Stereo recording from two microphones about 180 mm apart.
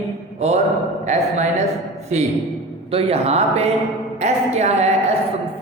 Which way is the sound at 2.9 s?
35° right (ahead or behind).